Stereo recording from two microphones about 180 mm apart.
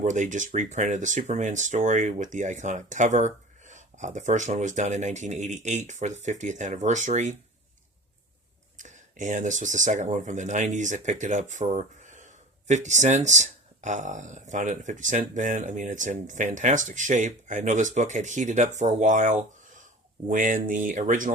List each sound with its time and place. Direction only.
0.0 s speech: 45° right (ahead or behind)
8.8 s speech: 45° right (ahead or behind)